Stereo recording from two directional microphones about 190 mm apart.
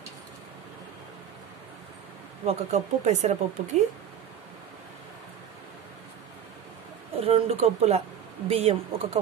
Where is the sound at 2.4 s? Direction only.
35° right (ahead or behind).